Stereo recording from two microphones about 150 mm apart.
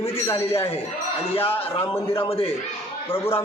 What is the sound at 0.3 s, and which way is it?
A man's voice, 40° left (ahead or behind).